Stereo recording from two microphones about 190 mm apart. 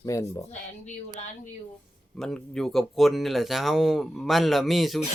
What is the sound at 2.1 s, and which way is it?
Speech, centre (ahead or behind).